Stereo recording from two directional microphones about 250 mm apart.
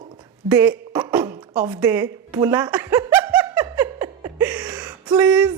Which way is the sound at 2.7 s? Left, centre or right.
Centre.